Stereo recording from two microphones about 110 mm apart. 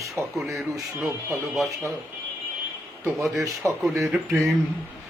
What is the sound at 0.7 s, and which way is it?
Speech, 25° right (ahead or behind).